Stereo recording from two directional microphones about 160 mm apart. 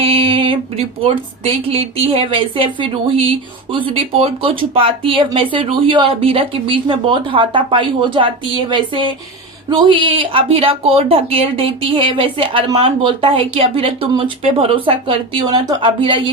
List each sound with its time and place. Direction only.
0.0 s speech: 35° right (ahead or behind)